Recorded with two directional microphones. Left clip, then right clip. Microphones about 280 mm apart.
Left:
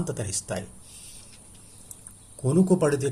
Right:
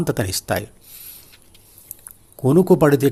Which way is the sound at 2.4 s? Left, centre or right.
Right.